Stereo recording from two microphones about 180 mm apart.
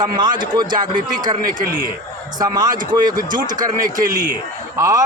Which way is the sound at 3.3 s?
45° right (ahead or behind).